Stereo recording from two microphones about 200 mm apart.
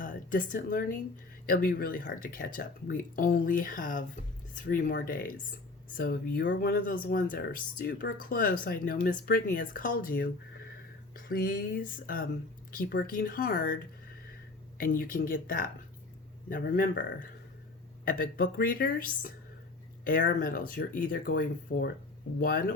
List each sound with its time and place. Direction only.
0.0 s speech: 40° left (ahead or behind)
14.8 s speech: 45° left (ahead or behind)
18.0 s speech: 45° left (ahead or behind)